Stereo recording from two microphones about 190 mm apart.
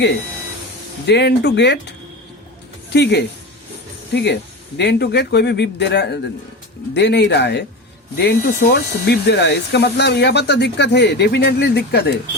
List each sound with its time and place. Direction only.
1.0 s speech: 60° left (ahead or behind)
2.9 s speech: 60° left (ahead or behind)